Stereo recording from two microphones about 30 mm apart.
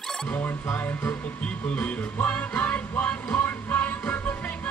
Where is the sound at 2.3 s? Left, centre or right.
Left.